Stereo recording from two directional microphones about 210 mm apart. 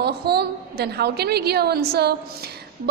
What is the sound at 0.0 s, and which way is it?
A woman's voice, 50° right (ahead or behind).